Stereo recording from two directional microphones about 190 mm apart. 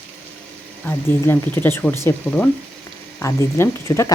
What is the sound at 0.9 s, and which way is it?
Speech, 10° left (ahead or behind).